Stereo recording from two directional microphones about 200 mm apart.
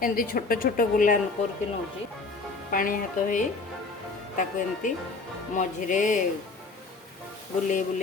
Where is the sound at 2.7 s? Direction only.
40° left (ahead or behind).